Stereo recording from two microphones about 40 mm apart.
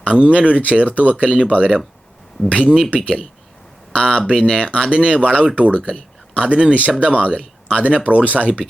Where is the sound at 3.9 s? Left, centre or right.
Left.